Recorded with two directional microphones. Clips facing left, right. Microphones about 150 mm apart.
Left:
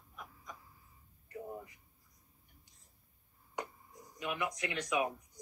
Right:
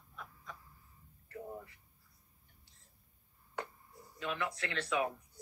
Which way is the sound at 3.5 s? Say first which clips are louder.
Left 1 dB; 15° left (ahead or behind).